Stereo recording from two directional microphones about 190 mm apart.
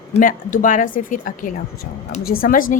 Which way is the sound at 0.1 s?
45° left (ahead or behind).